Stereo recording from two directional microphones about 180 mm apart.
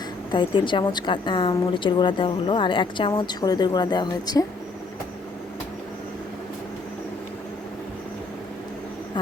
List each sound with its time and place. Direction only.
0.3 s a woman's voice: 25° left (ahead or behind)